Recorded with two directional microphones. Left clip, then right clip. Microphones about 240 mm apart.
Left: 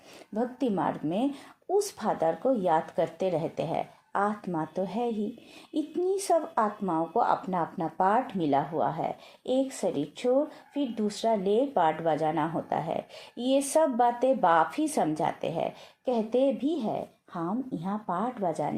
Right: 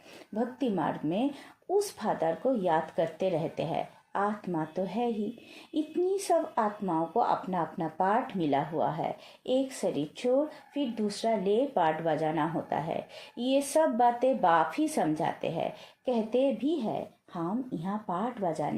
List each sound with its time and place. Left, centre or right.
0.3 s speech: left